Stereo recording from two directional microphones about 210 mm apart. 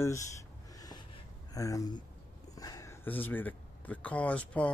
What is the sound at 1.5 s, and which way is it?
Speech, 15° left (ahead or behind).